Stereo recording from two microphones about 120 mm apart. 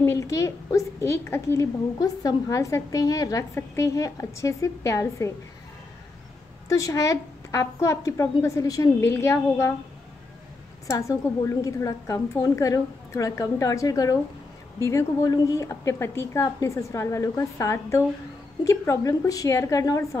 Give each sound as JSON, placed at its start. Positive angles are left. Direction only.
{"t": 0.0, "sound": "a woman's voice", "side_deg": 25}
{"t": 6.7, "sound": "a woman's voice", "side_deg": 25}
{"t": 10.9, "sound": "a woman's voice", "side_deg": 25}